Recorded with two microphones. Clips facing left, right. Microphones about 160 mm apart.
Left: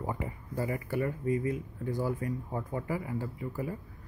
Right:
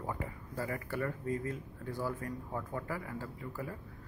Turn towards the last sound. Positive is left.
turn(degrees=15)  # may be behind; listen again after turning